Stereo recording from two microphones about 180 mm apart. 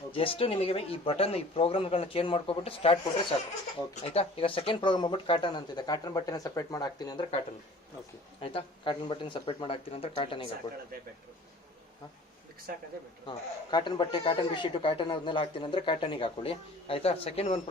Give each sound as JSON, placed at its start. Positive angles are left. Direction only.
{"t": 0.1, "sound": "speech", "side_deg": 30}
{"t": 8.4, "sound": "speech", "side_deg": 30}
{"t": 13.2, "sound": "speech", "side_deg": 25}